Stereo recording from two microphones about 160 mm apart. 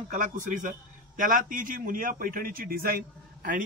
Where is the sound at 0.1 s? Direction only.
50° right (ahead or behind).